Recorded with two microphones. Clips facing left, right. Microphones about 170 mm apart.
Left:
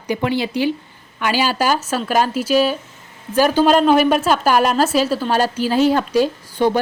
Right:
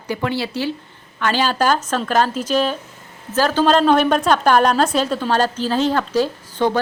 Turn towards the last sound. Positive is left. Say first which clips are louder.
# left 2 dB
turn(degrees=10)  # may be behind; listen again after turning